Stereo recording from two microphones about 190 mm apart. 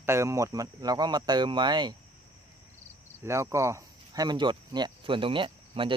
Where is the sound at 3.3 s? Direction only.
15° right (ahead or behind).